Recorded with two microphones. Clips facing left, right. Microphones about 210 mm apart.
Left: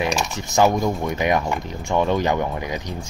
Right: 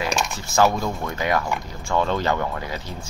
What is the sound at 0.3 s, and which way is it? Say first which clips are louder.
Speech: left 1 dB; 20° left (ahead or behind).